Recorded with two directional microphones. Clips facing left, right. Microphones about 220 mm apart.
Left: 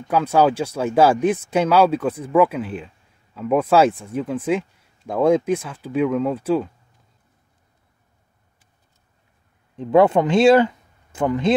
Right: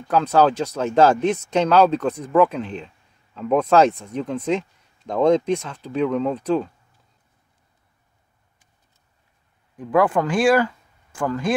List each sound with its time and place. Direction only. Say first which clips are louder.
0.1 s speech: even; 10° left (ahead or behind)
9.8 s speech: left 4 dB; 25° left (ahead or behind)